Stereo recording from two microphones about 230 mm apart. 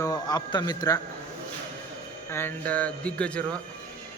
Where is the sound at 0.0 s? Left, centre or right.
Centre.